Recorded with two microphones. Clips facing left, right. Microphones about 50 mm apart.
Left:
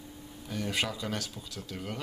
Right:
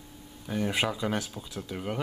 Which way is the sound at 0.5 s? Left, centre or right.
Centre.